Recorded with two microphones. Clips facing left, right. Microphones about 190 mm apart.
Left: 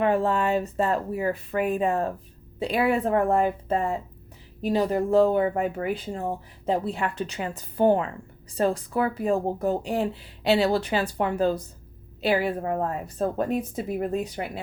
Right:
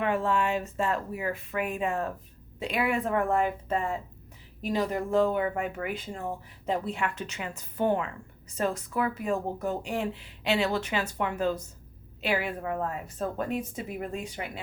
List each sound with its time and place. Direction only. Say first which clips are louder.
0.0 s speech: left 4 dB; 35° left (ahead or behind)